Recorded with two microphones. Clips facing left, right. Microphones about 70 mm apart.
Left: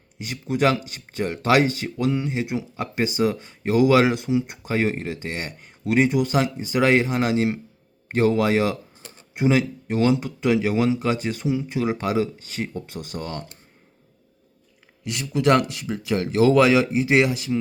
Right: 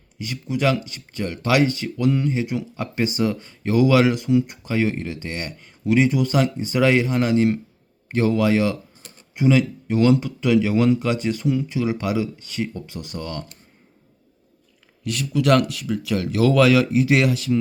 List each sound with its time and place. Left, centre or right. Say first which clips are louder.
0.5 s speech: left 1 dB; left
1.8 s speech: right 3 dB; centre
11.8 s speech: even; left
15.0 s speech: even; left